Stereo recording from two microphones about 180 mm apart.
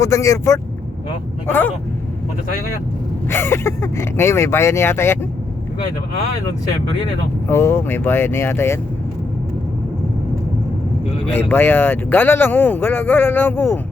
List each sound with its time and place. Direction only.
0.0 s speech: 15° left (ahead or behind)
3.2 s speech: 15° left (ahead or behind)
7.4 s speech: 15° left (ahead or behind)
11.3 s speech: 10° left (ahead or behind)